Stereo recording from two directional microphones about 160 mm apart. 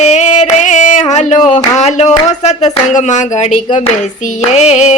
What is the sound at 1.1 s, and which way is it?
Speech, 50° left (ahead or behind).